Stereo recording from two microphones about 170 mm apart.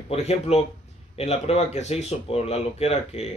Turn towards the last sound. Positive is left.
turn(degrees=40)  # may be behind; listen again after turning